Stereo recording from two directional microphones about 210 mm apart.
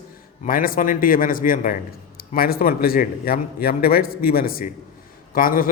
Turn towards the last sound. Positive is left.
turn(degrees=45)  # may be behind; listen again after turning